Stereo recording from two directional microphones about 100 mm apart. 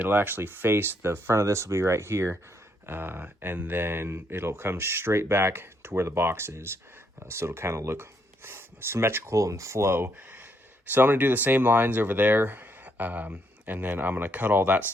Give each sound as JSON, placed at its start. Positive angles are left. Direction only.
{"t": 0.0, "sound": "speech", "side_deg": -20}